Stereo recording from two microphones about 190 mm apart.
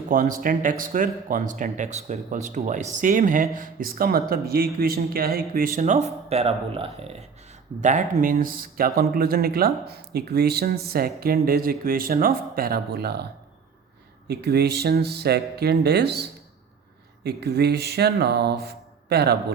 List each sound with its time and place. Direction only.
0.1 s speech: 45° right (ahead or behind)
5.8 s speech: 35° right (ahead or behind); by 13.2 s 60° right (ahead or behind)
14.3 s speech: 60° right (ahead or behind)